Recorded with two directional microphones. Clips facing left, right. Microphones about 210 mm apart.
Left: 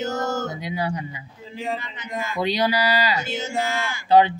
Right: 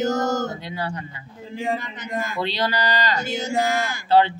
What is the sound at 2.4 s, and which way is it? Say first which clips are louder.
Speech: left 5 dB; 10° left (ahead or behind).